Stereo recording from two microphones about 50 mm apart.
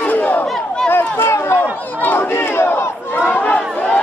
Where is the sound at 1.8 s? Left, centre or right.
Left.